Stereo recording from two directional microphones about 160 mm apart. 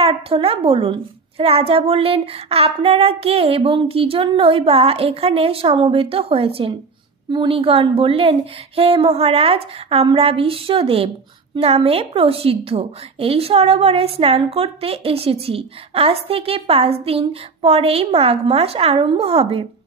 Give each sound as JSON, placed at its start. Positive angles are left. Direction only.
{"t": 0.0, "sound": "a child's voice", "side_deg": -35}